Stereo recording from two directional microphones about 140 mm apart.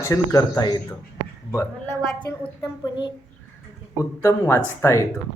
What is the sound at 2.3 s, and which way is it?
Speech, 20° left (ahead or behind).